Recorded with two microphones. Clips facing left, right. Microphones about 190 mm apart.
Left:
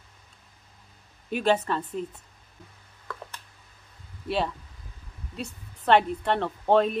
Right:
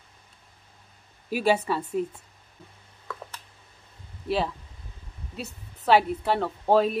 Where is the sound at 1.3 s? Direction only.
10° right (ahead or behind).